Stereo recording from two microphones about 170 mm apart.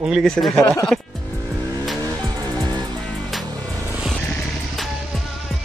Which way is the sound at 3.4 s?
20° right (ahead or behind).